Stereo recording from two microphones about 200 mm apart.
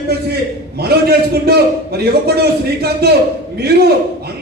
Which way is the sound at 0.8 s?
50° right (ahead or behind).